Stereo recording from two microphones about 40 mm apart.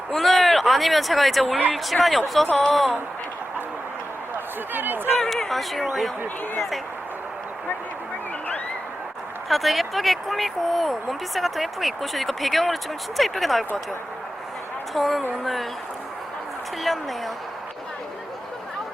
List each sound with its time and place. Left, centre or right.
0.1 s speech: centre
4.7 s speech: right
5.5 s speech: centre
9.5 s speech: centre
14.9 s speech: centre
16.8 s speech: centre